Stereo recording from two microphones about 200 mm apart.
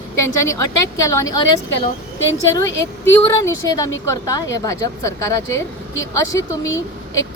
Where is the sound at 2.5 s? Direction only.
15° left (ahead or behind).